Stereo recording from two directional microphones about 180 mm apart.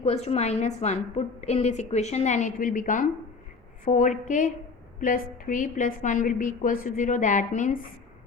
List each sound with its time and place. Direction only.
0.0 s a woman's voice: 35° left (ahead or behind)